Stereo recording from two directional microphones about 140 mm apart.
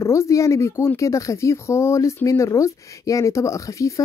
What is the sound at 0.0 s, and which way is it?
Speech, 20° left (ahead or behind).